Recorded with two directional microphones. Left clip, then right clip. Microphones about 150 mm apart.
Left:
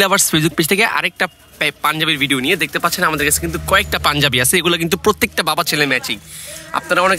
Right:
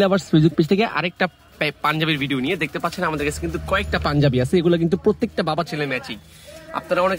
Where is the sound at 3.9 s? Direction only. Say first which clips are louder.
Left 6 dB; 30° left (ahead or behind).